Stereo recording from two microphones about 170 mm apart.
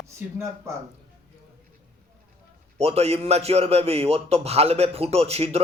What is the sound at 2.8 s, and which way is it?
A man's voice, 35° right (ahead or behind).